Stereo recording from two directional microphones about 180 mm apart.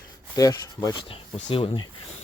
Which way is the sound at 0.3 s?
20° left (ahead or behind).